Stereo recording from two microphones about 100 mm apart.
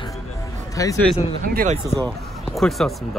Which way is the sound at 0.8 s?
35° left (ahead or behind).